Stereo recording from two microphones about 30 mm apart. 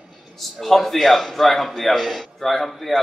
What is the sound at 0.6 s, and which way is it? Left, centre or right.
A man's voice, centre.